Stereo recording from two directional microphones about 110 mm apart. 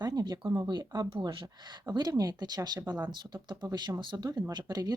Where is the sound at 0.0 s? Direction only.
40° right (ahead or behind).